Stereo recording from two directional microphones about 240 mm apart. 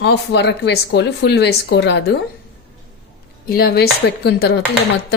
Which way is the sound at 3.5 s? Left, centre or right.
Left.